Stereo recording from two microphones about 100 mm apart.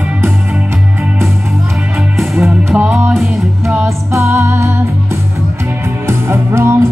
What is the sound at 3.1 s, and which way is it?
Music, centre (ahead or behind).